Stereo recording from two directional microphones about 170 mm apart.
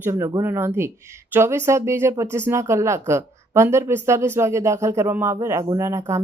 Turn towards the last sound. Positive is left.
turn(degrees=-15)  # may be behind; listen again after turning